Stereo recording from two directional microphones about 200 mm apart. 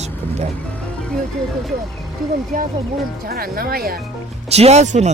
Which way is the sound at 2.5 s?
45° right (ahead or behind).